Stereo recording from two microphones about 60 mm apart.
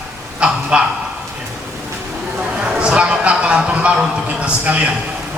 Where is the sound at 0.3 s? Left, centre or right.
Centre.